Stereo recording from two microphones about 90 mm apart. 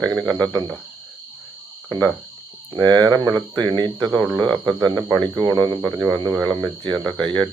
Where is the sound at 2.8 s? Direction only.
50° right (ahead or behind).